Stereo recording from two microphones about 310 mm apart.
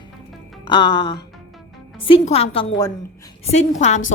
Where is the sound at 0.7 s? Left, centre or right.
Centre.